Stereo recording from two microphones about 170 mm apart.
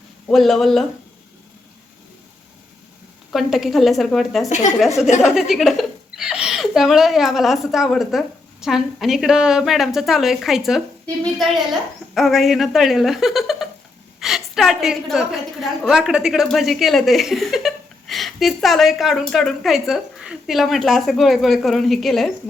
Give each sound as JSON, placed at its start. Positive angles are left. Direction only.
{"t": 0.3, "sound": "a woman's voice", "side_deg": 0}
{"t": 3.3, "sound": "a woman's voice", "side_deg": 0}
{"t": 4.4, "sound": "a woman's voice", "side_deg": 45}
{"t": 5.2, "sound": "a woman's voice", "side_deg": 0}
{"t": 12.1, "sound": "a woman's voice", "side_deg": 0}